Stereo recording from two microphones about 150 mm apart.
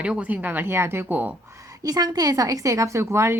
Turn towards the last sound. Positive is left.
turn(degrees=-20)  # may be behind; listen again after turning